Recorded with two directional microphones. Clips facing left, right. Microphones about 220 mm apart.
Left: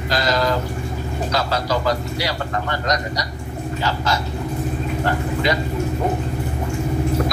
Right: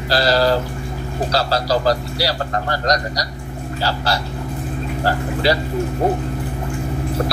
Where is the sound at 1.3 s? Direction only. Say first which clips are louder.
Right 3 dB; 35° right (ahead or behind).